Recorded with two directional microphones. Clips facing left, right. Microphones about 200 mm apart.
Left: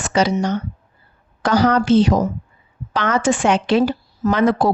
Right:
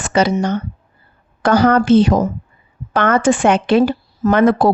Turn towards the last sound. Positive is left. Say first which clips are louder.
# right 4 dB
turn(degrees=-55)  # may be behind; listen again after turning